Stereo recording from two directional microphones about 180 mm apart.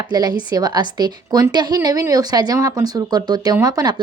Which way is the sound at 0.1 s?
25° right (ahead or behind).